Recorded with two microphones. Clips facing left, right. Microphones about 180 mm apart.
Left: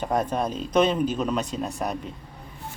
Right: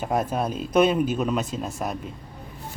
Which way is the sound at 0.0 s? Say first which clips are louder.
Even; 5° right (ahead or behind).